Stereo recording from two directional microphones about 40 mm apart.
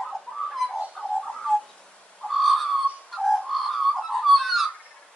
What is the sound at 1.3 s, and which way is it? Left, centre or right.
Bird, centre.